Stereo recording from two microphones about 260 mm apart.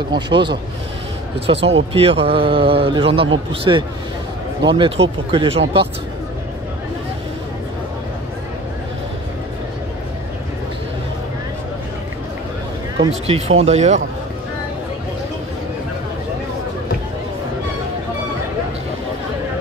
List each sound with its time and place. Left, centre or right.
0.1 s speech: centre
1.5 s a man's voice: centre
13.0 s a man's voice: right